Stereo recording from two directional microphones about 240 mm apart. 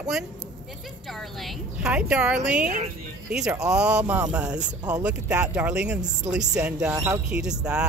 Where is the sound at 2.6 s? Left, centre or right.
Right.